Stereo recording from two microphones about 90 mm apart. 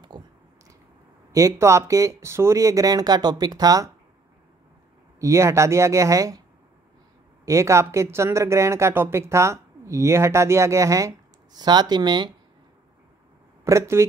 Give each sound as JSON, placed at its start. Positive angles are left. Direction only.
{"t": 0.1, "sound": "a sound", "side_deg": -55}
{"t": 1.3, "sound": "speech", "side_deg": -35}
{"t": 5.2, "sound": "speech", "side_deg": -30}
{"t": 7.4, "sound": "speech", "side_deg": -35}
{"t": 11.6, "sound": "speech", "side_deg": -50}
{"t": 13.7, "sound": "speech", "side_deg": -30}